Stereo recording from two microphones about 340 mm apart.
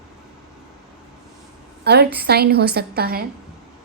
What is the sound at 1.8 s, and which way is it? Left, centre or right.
A woman's voice, right.